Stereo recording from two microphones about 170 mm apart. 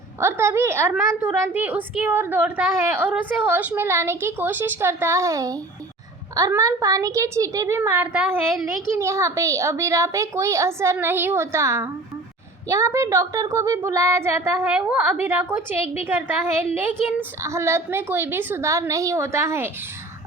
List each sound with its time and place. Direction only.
0.2 s a woman's voice: 15° right (ahead or behind)